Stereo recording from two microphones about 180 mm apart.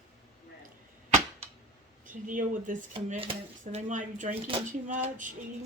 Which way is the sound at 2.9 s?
30° right (ahead or behind).